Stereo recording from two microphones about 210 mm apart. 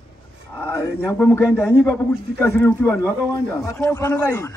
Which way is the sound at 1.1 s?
10° left (ahead or behind).